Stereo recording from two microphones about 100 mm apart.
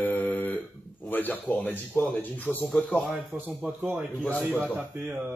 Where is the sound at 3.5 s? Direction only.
20° right (ahead or behind).